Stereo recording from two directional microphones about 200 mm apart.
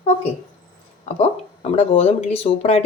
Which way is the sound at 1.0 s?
30° left (ahead or behind).